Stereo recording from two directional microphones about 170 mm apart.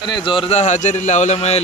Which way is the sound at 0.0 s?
25° left (ahead or behind).